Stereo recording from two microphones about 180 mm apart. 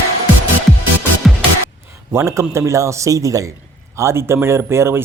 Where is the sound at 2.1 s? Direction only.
15° right (ahead or behind).